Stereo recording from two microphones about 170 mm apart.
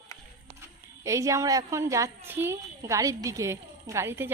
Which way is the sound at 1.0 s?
20° right (ahead or behind).